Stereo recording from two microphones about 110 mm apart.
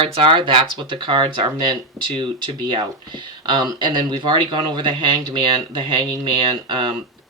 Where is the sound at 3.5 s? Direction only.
45° right (ahead or behind).